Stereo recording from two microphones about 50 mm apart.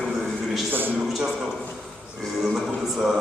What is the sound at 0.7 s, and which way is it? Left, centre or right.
Speech, right.